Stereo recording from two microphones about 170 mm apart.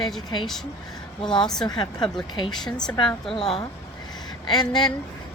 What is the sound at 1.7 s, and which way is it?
Speech, 25° left (ahead or behind).